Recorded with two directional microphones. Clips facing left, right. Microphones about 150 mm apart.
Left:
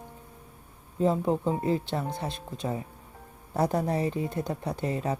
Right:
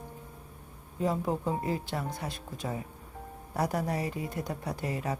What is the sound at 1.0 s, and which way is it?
Speech, 25° left (ahead or behind).